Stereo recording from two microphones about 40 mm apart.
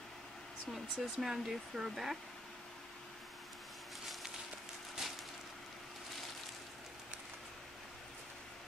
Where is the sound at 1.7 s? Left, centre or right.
Centre.